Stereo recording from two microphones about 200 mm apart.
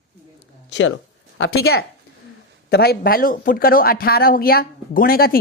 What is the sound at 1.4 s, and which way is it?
A woman's voice, 55° left (ahead or behind).